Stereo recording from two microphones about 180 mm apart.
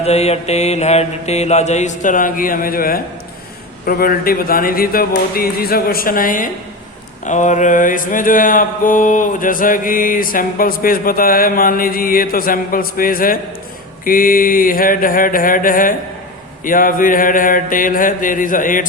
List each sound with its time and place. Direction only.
0.0 s mantra: 35° left (ahead or behind)